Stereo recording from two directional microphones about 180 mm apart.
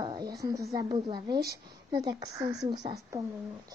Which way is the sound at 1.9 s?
20° right (ahead or behind).